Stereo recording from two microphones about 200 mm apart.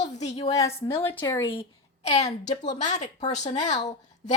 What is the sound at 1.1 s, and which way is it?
Speech, 10° left (ahead or behind).